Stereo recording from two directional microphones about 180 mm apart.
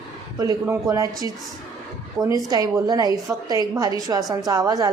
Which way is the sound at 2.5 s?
20° right (ahead or behind).